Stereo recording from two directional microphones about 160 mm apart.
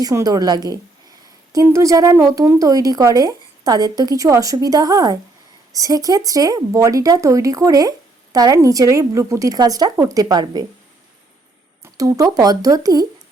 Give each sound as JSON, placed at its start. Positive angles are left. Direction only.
{"t": 0.0, "sound": "speech", "side_deg": -20}
{"t": 11.8, "sound": "speech", "side_deg": -20}